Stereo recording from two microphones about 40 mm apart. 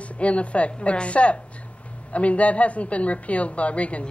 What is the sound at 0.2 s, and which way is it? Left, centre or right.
A woman's voice, left.